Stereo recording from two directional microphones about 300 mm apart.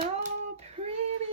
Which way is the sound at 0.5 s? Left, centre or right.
Right.